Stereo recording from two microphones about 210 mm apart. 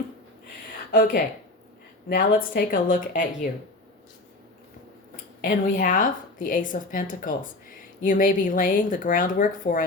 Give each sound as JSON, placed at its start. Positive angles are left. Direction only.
{"t": 0.9, "sound": "a woman's voice", "side_deg": 45}
{"t": 5.4, "sound": "a woman's voice", "side_deg": 40}